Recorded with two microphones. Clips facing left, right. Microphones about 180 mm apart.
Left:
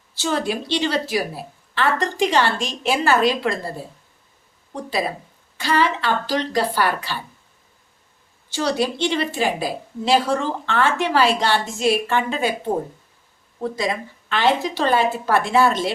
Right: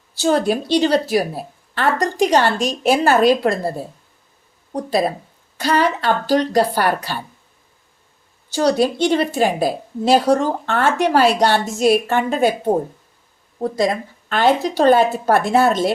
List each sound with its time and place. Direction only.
0.2 s a woman's voice: 40° right (ahead or behind)
4.7 s a woman's voice: 40° right (ahead or behind)
8.5 s a woman's voice: 40° right (ahead or behind)